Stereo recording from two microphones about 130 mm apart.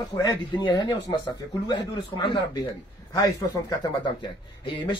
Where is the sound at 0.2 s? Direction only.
30° left (ahead or behind).